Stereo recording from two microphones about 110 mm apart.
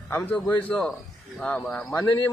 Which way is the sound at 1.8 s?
20° left (ahead or behind).